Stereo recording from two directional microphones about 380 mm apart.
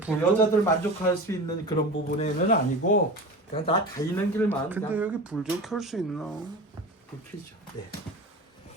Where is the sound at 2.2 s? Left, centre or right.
Left.